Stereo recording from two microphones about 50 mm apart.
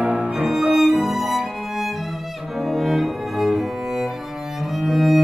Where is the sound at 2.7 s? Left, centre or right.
Centre.